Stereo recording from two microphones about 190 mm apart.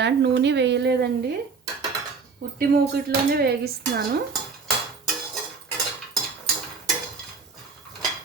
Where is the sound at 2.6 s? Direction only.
55° right (ahead or behind).